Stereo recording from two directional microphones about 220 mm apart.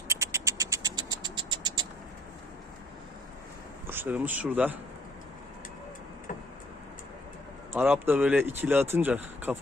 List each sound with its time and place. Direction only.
0.1 s mechanisms: 15° right (ahead or behind)
3.8 s speech: 10° right (ahead or behind)
7.7 s speech: 10° right (ahead or behind)